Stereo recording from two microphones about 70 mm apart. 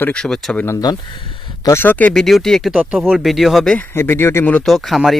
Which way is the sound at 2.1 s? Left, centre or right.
Centre.